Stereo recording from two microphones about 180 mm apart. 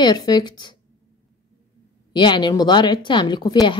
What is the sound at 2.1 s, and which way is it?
A woman's voice, 25° left (ahead or behind).